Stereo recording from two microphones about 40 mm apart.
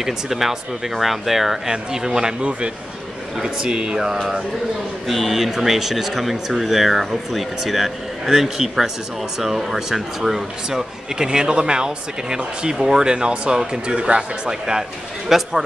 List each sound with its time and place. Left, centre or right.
0.0 s speech: centre
3.3 s speech: centre
5.0 s speech: centre; by 14.5 s right
14.5 s speech: centre